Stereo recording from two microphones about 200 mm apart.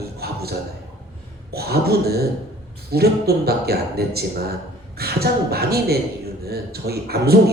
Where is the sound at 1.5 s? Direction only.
50° right (ahead or behind).